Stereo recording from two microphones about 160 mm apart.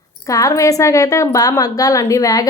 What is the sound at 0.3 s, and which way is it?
A woman's voice, 20° left (ahead or behind).